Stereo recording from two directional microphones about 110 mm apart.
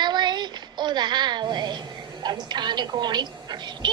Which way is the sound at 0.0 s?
40° right (ahead or behind).